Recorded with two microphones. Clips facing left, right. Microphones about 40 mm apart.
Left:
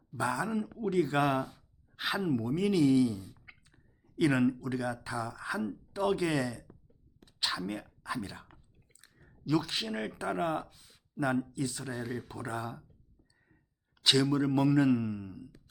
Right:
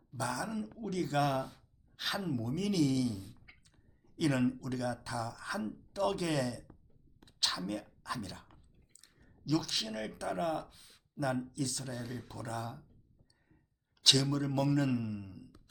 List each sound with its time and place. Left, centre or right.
0.2 s a man's voice: left
3.3 s a sound: centre
5.0 s speech: centre
10.7 s speech: centre
11.5 s a man's voice: centre
14.0 s a man's voice: centre